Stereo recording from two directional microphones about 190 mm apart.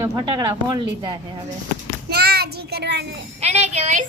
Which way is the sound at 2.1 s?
55° right (ahead or behind).